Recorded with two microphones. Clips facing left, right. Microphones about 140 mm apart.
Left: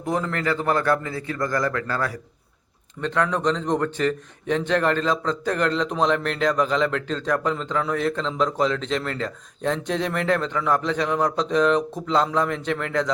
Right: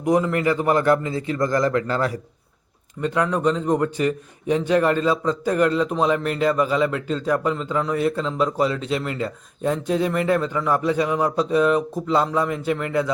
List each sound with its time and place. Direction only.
0.0 s a man's voice: 15° right (ahead or behind)
3.0 s a man's voice: 10° right (ahead or behind)